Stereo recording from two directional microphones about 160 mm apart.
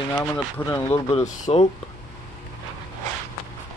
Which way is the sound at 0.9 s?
35° left (ahead or behind).